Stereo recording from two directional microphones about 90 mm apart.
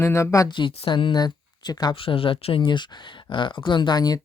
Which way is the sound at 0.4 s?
65° left (ahead or behind).